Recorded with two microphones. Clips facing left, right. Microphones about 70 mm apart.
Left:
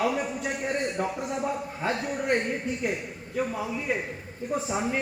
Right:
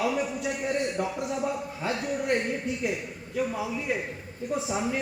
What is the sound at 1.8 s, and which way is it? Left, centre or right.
Speech, left.